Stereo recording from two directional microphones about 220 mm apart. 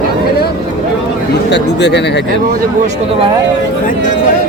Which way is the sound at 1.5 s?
50° left (ahead or behind).